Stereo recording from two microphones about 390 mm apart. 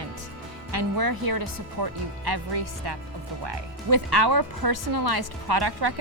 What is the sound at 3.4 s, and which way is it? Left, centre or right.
Speech, right.